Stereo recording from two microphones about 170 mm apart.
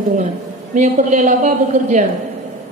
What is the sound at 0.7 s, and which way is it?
A woman's voice, 45° right (ahead or behind).